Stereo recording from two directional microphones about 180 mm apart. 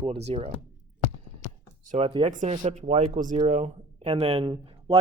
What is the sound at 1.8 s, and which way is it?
Speech, 45° right (ahead or behind).